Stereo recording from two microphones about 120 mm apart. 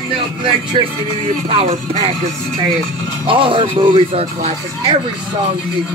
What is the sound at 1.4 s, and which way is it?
Speech, 55° right (ahead or behind).